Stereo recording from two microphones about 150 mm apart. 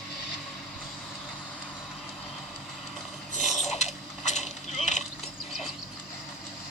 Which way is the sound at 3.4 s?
Centre (ahead or behind).